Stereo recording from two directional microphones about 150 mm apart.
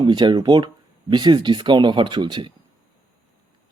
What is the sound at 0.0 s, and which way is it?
Speech, 30° right (ahead or behind).